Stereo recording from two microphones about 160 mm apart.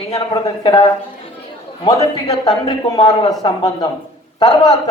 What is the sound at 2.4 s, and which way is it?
A woman's voice, 25° left (ahead or behind).